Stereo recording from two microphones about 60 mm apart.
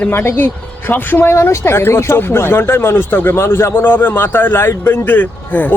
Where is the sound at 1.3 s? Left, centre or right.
Left.